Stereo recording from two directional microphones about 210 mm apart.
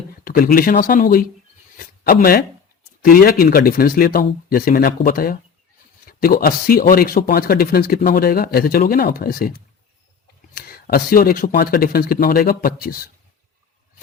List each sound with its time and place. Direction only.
0.3 s speech: 45° left (ahead or behind)
10.5 s speech: 45° left (ahead or behind)